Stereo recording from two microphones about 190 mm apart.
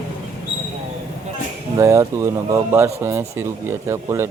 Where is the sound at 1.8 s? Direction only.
15° right (ahead or behind).